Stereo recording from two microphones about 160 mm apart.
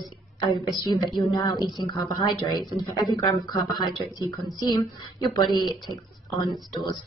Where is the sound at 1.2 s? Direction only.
25° left (ahead or behind).